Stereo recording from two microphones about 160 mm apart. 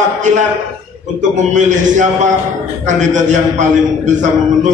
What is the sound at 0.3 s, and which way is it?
A man's voice, 50° right (ahead or behind).